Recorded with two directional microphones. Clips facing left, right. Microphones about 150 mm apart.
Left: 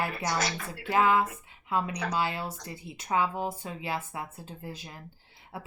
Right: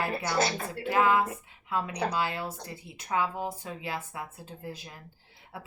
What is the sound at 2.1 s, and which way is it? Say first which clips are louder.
Speech: even; 25° left (ahead or behind).